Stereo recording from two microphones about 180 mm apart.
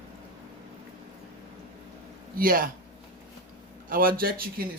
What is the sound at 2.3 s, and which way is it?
Speech, 50° right (ahead or behind).